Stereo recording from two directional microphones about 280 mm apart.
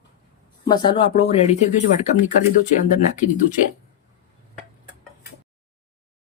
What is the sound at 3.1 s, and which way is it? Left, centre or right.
Speech, left.